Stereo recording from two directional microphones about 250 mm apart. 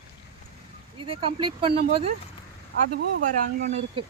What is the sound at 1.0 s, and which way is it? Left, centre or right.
Speech, right.